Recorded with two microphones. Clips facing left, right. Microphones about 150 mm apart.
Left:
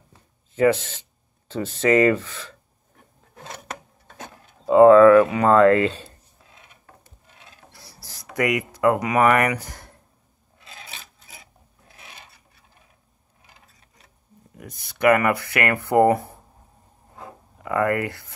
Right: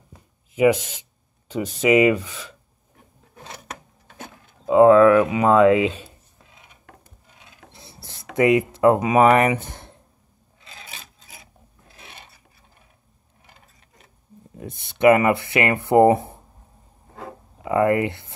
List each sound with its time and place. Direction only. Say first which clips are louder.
0.6 s speech: right 1 dB; 10° right (ahead or behind)
4.6 s speech: left 1 dB; 5° right (ahead or behind)
7.7 s a sound: right 2 dB; 25° right (ahead or behind)
14.5 s speech: right 5 dB; 25° right (ahead or behind)
17.6 s speech: right 3 dB; 20° right (ahead or behind)